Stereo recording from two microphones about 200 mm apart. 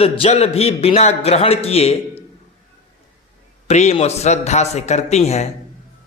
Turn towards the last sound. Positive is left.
turn(degrees=35)  # may be behind; listen again after turning